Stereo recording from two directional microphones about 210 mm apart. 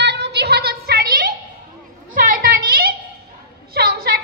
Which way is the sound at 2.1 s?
40° right (ahead or behind).